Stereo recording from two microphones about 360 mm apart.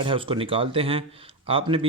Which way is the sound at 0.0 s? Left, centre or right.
Centre.